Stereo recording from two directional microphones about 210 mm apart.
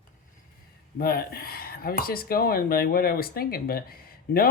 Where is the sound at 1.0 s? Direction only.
45° left (ahead or behind).